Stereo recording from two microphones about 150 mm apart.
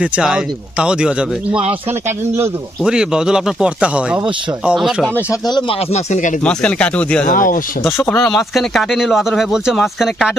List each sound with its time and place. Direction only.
0.0 s speech: 5° right (ahead or behind)
2.8 s speech: 5° right (ahead or behind)
5.3 s speech: 30° left (ahead or behind)
5.9 s speech: 55° left (ahead or behind)
6.4 s speech: 5° left (ahead or behind)
7.3 s speech: 65° left (ahead or behind)
7.9 s speech: 15° left (ahead or behind)
8.2 s speech: centre (ahead or behind)